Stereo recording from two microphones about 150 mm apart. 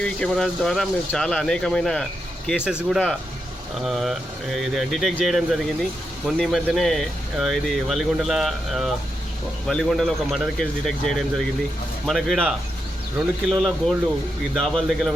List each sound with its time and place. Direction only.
0.0 s speech: 5° left (ahead or behind)